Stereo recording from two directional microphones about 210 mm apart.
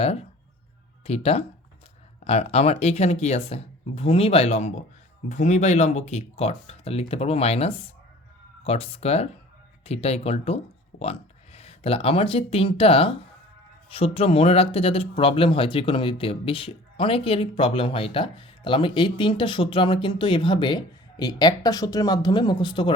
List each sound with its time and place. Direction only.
0.0 s speech: 30° left (ahead or behind)